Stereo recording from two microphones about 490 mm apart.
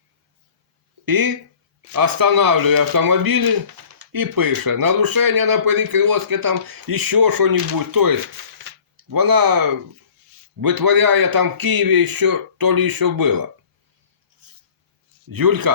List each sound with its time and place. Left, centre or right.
1.0 s speech: right
15.3 s speech: right